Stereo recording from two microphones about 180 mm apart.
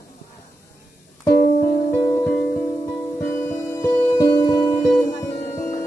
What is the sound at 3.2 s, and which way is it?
Music, 15° left (ahead or behind).